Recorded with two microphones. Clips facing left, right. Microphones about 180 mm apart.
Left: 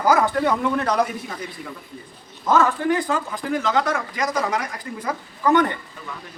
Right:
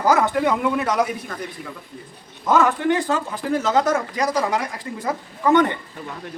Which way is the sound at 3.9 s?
35° right (ahead or behind).